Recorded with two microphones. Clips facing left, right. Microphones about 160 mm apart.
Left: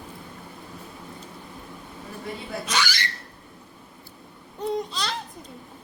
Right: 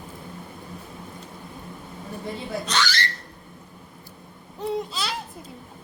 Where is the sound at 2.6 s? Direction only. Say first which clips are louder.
Right 1 dB; 10° left (ahead or behind).